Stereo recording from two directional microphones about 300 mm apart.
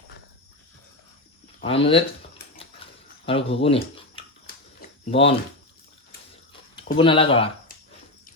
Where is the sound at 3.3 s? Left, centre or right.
Centre.